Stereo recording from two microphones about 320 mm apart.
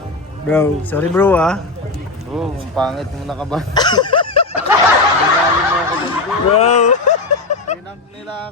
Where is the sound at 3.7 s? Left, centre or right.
Centre.